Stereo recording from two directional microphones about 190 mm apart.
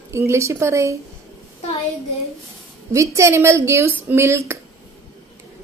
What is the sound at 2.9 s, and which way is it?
Speech, 15° right (ahead or behind).